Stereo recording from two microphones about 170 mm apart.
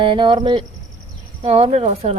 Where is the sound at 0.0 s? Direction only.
30° right (ahead or behind).